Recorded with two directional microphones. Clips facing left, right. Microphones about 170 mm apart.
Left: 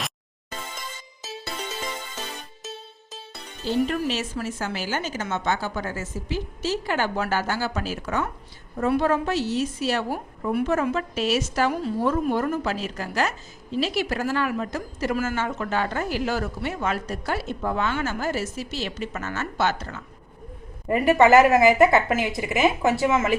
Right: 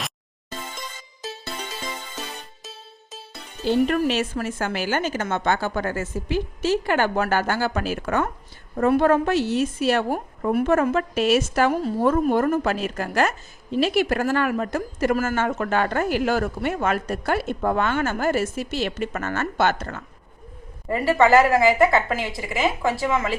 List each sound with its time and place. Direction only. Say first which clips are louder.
3.8 s a woman's voice: right 5 dB; 60° right (ahead or behind)
20.9 s speech: left 1 dB; 20° left (ahead or behind)